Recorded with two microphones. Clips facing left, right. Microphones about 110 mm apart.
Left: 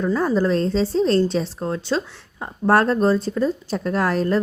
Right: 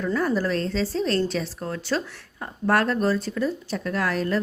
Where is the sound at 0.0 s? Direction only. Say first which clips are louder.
Left 4 dB; 25° left (ahead or behind).